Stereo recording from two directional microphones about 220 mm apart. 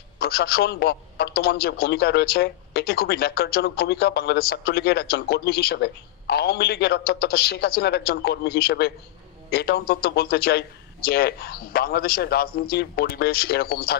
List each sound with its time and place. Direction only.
0.2 s a man's voice: 45° left (ahead or behind)